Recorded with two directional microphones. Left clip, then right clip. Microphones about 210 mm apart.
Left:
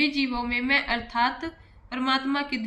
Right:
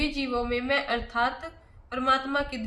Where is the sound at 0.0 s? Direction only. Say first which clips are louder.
Left 3 dB; 20° right (ahead or behind).